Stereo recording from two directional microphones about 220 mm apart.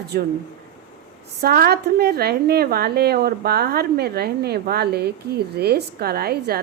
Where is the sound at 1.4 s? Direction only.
45° right (ahead or behind).